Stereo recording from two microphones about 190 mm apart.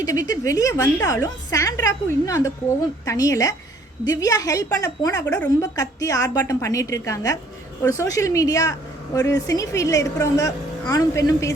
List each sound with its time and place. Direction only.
0.0 s a woman's voice: 20° left (ahead or behind)